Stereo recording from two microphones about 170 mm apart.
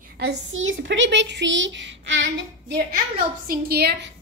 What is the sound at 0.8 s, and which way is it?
A child's voice, 90° right.